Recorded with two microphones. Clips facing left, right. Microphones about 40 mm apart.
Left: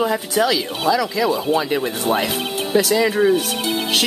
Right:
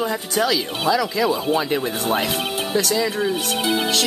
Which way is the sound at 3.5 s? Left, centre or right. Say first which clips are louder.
Right 1 dB; centre.